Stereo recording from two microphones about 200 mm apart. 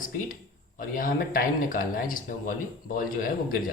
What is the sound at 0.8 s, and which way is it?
Speech, 45° left (ahead or behind).